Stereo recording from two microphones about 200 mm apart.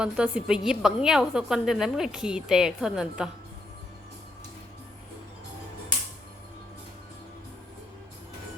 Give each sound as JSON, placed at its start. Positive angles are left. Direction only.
{"t": 0.0, "sound": "a woman's voice", "side_deg": -5}